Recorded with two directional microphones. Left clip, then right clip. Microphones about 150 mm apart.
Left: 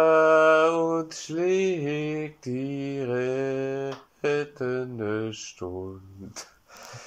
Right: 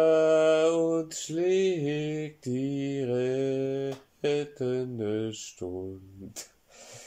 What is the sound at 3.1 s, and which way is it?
Speech, 30° right (ahead or behind).